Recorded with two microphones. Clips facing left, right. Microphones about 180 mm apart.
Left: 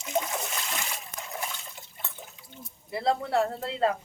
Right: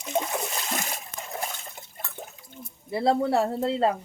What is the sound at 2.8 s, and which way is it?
Speech, 25° right (ahead or behind).